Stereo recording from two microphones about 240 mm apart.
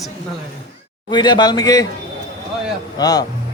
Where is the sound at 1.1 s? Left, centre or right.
Centre.